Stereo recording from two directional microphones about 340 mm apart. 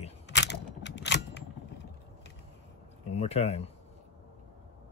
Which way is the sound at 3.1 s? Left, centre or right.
Centre.